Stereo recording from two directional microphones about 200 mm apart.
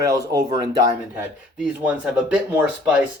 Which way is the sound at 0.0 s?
15° right (ahead or behind).